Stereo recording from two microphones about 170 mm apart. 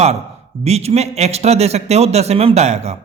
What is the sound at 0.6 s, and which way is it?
Speech, 40° right (ahead or behind).